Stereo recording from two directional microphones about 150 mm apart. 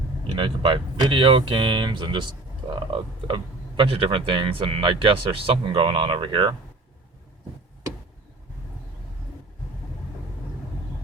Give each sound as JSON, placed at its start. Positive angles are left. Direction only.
{"t": 0.3, "sound": "speech", "side_deg": -35}